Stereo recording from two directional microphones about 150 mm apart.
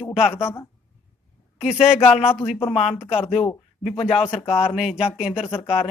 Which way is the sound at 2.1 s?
40° left (ahead or behind).